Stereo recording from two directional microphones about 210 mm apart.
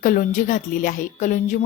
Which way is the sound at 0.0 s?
40° left (ahead or behind).